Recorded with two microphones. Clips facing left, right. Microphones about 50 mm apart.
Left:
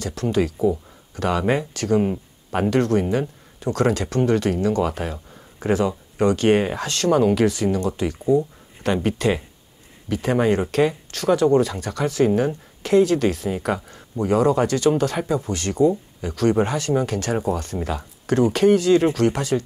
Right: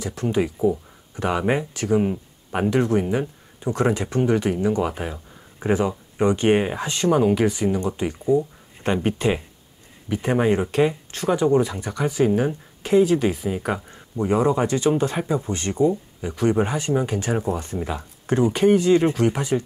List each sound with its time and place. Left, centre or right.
0.0 s speech: centre
2.0 s speech: centre
2.7 s speech: centre